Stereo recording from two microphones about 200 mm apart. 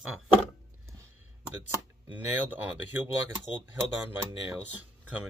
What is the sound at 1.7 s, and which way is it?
Speech, 10° right (ahead or behind).